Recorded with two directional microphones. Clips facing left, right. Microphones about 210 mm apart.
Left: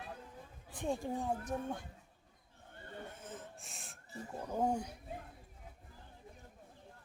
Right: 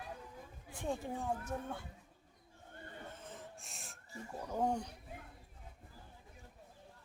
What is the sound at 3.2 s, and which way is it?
Snort, centre (ahead or behind).